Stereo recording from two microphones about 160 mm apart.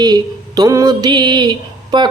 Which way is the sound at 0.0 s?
25° right (ahead or behind).